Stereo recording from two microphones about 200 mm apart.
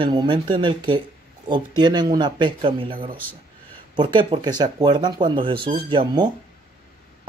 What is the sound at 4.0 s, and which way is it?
A man's voice, 25° right (ahead or behind).